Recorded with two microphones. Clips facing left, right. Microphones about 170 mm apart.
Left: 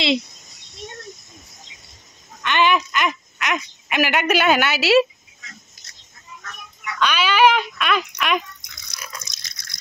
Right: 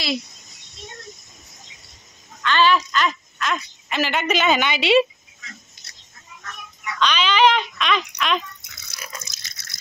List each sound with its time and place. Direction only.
2.4 s speech: 15° left (ahead or behind)
5.8 s a sound: 25° right (ahead or behind)
7.0 s speech: 10° left (ahead or behind)
8.6 s drip: 5° right (ahead or behind)